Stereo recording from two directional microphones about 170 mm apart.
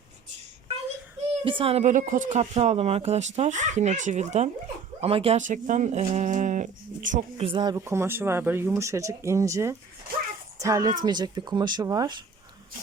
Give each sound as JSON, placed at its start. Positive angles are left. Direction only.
{"t": 1.5, "sound": "speech", "side_deg": -30}
{"t": 5.4, "sound": "speech", "side_deg": -50}
{"t": 10.1, "sound": "a sound", "side_deg": -60}
{"t": 10.6, "sound": "speech", "side_deg": -20}